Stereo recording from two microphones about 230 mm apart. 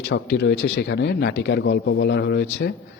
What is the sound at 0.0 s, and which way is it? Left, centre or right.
Speech, left.